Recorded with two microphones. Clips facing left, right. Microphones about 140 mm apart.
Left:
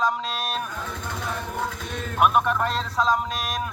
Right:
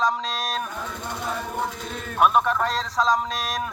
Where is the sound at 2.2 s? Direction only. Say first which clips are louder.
Right 1 dB; 5° left (ahead or behind).